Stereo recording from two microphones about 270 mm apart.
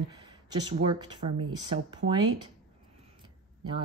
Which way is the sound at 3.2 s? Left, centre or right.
Centre.